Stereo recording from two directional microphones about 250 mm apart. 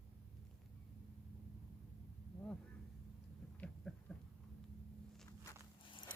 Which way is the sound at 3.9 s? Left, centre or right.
Centre.